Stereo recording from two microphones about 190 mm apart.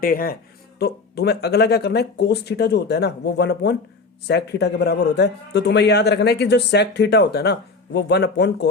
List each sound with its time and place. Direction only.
0.0 s a man's voice: 50° left (ahead or behind)